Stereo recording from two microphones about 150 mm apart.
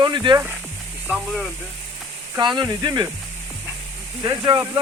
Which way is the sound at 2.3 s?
30° right (ahead or behind).